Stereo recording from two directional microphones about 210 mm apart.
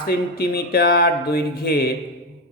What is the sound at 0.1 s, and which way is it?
Speech, 45° left (ahead or behind).